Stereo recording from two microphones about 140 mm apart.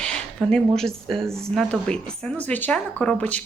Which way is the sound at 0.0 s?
5° left (ahead or behind).